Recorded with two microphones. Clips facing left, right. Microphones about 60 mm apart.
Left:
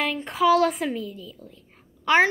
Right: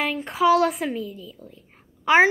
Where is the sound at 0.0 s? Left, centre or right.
Centre.